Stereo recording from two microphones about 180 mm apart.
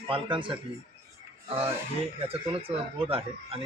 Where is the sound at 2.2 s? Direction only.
35° right (ahead or behind).